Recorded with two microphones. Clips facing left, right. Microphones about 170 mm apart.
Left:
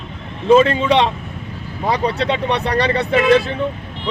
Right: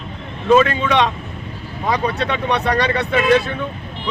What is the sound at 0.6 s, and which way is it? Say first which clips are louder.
Speech: left 2 dB; 30° left (ahead or behind).